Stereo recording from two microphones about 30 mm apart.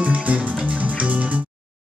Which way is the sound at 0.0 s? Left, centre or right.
Right.